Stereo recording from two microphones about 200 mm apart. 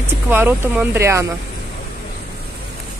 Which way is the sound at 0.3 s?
10° right (ahead or behind).